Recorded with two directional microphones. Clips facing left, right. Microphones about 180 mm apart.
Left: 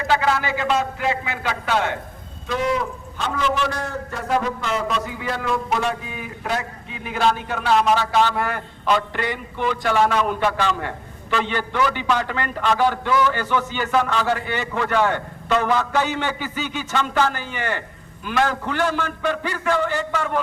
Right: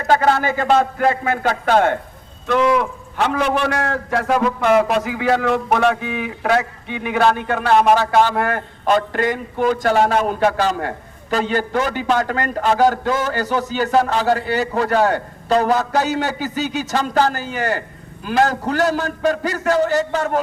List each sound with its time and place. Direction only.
0.1 s a man's voice: 50° right (ahead or behind)
2.5 s a man's voice: 60° right (ahead or behind); by 20.4 s 40° right (ahead or behind)